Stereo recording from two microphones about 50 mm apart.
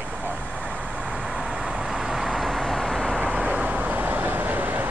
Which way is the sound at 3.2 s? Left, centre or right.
Right.